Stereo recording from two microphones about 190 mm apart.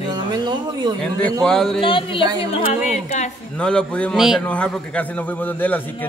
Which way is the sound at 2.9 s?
40° left (ahead or behind).